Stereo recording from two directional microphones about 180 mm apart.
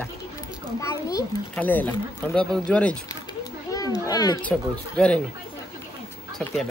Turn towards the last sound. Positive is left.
turn(degrees=5)  # may be behind; listen again after turning